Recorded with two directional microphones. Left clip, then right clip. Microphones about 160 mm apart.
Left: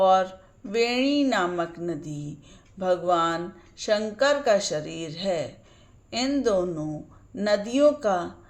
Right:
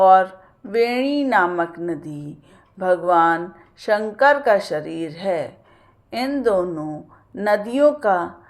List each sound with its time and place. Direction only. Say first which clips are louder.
0.0 s a woman's voice: right 7 dB; 20° left (ahead or behind)